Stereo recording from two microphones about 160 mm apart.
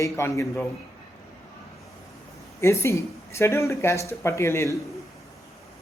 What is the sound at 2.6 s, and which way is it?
Speech, 20° left (ahead or behind).